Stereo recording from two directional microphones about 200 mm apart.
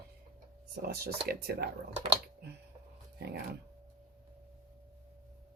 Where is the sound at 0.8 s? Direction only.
55° right (ahead or behind).